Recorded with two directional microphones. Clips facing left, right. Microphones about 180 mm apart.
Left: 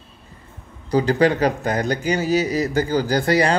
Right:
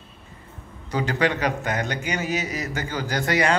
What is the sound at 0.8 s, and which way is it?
A man's voice, 35° left (ahead or behind).